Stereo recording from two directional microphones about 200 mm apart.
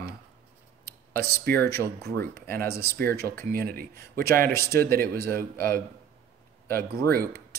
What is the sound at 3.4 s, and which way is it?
Speech, 50° right (ahead or behind).